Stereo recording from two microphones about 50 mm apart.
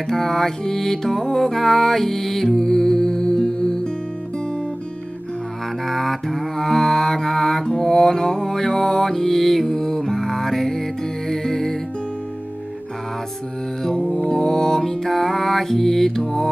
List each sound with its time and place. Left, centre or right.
0.1 s music: centre
5.9 s mantra: centre
13.8 s music: centre